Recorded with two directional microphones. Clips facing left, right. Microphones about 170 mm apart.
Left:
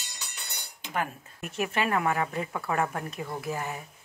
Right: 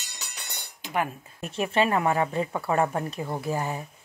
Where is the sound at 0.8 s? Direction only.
10° right (ahead or behind).